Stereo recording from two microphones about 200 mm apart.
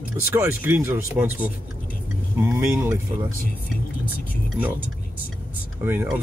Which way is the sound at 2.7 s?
15° right (ahead or behind).